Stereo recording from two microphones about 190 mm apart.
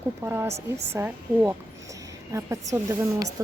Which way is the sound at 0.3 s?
10° right (ahead or behind).